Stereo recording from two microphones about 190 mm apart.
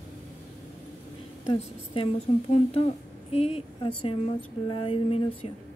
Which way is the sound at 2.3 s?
35° left (ahead or behind).